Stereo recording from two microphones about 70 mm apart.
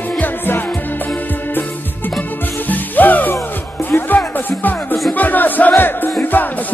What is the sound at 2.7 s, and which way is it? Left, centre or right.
Music, left.